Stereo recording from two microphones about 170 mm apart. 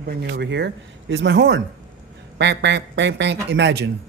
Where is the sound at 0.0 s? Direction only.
75° right (ahead or behind).